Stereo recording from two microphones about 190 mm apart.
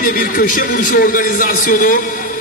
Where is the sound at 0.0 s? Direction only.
45° left (ahead or behind).